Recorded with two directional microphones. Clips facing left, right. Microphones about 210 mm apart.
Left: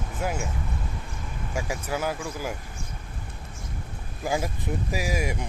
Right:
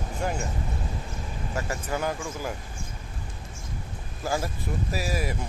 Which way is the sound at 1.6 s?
10° left (ahead or behind).